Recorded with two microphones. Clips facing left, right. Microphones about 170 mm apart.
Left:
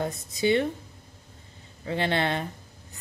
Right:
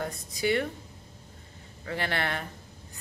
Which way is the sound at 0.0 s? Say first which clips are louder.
Left 4 dB; 25° left (ahead or behind).